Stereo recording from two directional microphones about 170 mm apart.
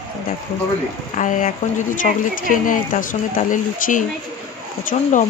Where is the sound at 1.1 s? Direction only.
50° left (ahead or behind).